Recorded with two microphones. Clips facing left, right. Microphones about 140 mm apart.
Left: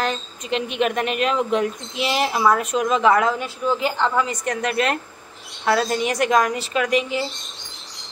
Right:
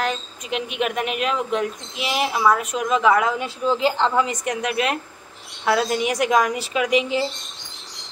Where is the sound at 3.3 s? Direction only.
25° right (ahead or behind).